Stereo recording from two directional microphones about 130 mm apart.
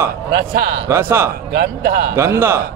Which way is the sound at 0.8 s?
20° right (ahead or behind).